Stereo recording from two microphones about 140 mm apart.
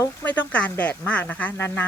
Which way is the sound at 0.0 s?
10° left (ahead or behind).